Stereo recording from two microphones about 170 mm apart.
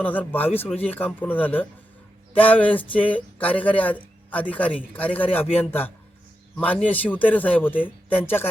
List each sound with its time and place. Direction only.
0.0 s speech: 10° left (ahead or behind)